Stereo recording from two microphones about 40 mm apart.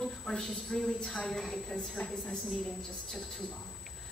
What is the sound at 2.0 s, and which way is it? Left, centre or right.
Speech, left.